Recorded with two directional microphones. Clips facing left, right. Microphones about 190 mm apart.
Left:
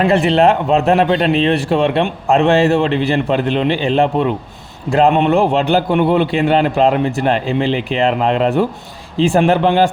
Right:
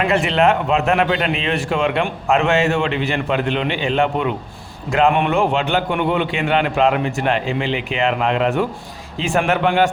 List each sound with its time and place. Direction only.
0.0 s a man's voice: 35° left (ahead or behind)